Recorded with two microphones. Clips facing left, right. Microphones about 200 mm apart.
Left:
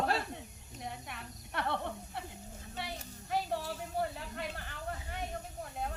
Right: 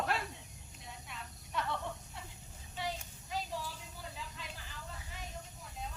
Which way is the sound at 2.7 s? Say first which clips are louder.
Right 2 dB; 65° left (ahead or behind).